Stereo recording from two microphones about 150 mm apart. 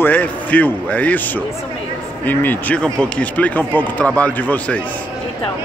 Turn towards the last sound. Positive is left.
turn(degrees=10)  # may be behind; listen again after turning